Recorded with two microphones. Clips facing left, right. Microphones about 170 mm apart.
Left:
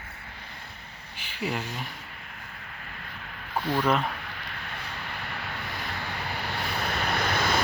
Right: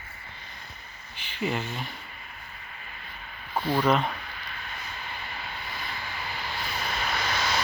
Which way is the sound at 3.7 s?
10° right (ahead or behind).